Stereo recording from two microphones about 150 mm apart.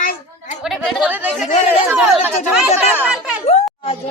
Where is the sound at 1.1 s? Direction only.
10° right (ahead or behind).